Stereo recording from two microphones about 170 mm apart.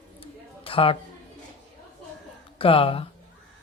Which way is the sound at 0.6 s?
30° left (ahead or behind).